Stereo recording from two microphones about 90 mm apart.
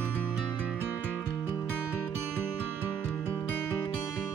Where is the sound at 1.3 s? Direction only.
40° left (ahead or behind).